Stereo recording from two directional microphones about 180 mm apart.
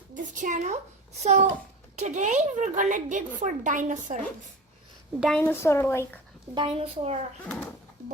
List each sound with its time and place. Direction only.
0.1 s a woman's voice: 45° right (ahead or behind)
5.2 s a woman's voice: 5° left (ahead or behind)
6.5 s a woman's voice: 30° right (ahead or behind)
7.4 s a woman's voice: 5° left (ahead or behind)